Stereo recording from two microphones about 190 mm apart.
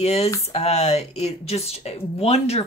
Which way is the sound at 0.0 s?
35° left (ahead or behind).